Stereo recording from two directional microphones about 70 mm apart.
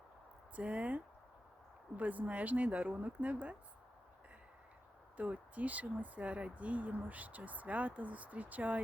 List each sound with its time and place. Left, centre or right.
0.5 s speech: centre
5.1 s speech: right